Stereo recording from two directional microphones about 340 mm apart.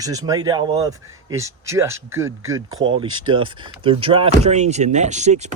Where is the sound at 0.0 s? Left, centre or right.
Centre.